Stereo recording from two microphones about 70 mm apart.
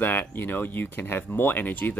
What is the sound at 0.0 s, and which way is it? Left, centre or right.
Speech, left.